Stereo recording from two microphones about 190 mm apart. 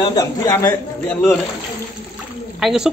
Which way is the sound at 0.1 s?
20° left (ahead or behind).